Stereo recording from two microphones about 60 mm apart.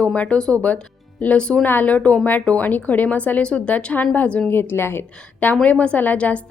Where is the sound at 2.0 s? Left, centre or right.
Centre.